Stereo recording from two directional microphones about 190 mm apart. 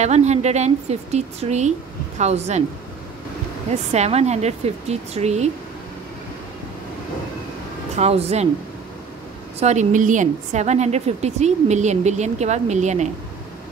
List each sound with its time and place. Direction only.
0.0 s a woman's voice: 35° right (ahead or behind)
3.9 s a woman's voice: 35° right (ahead or behind)
7.9 s a woman's voice: 35° right (ahead or behind)
9.6 s a woman's voice: 35° right (ahead or behind)